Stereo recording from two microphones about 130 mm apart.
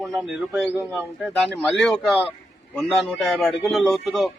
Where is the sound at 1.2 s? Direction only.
Centre (ahead or behind).